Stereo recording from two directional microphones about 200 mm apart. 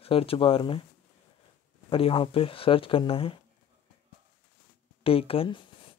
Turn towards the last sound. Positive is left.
turn(degrees=25)  # may be behind; listen again after turning